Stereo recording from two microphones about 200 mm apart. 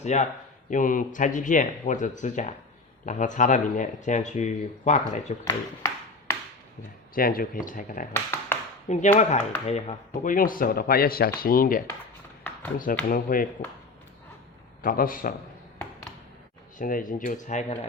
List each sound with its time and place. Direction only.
0.0 s speech: 35° left (ahead or behind)
5.5 s a sound: 15° left (ahead or behind)
7.1 s speech: 45° left (ahead or behind)
8.1 s speech: 10° left (ahead or behind)
8.9 s speech: 35° left (ahead or behind)
13.1 s speech: 45° left (ahead or behind)
14.8 s speech: 45° left (ahead or behind)
16.7 s speech: 40° left (ahead or behind)